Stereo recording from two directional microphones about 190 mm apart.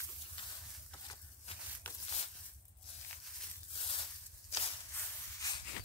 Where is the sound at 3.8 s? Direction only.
30° left (ahead or behind).